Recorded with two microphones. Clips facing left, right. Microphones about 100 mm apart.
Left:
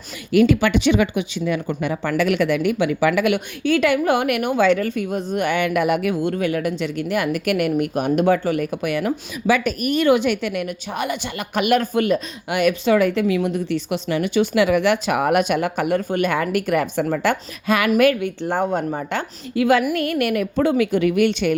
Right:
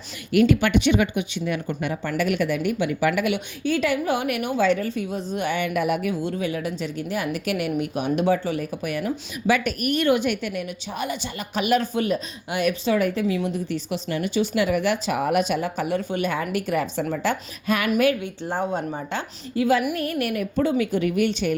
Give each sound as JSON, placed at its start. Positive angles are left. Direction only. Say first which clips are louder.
{"t": 0.7, "sound": "speech", "louder": "left 2 dB", "side_deg": 90}
{"t": 3.6, "sound": "a woman's voice", "louder": "left 5 dB", "side_deg": 75}
{"t": 10.1, "sound": "a woman's voice", "louder": "left 5 dB", "side_deg": 90}
{"t": 16.0, "sound": "a woman's voice", "louder": "left 5 dB", "side_deg": 50}